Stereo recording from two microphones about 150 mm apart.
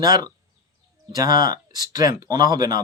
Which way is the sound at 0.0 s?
25° right (ahead or behind).